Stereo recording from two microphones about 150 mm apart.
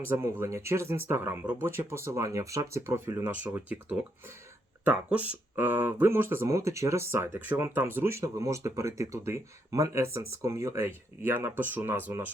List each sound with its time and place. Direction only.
0.0 s speech: 15° right (ahead or behind)